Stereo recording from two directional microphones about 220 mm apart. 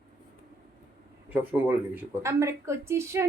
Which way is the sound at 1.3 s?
10° right (ahead or behind).